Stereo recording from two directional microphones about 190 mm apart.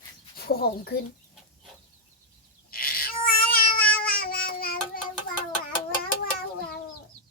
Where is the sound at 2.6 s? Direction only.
50° left (ahead or behind).